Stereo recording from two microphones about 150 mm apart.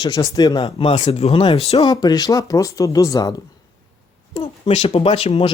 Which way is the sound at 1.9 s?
25° left (ahead or behind).